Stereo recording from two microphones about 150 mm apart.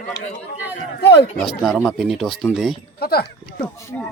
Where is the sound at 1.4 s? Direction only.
Centre (ahead or behind).